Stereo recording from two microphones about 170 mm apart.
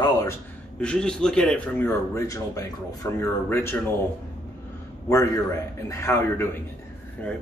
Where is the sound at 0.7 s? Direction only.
5° left (ahead or behind).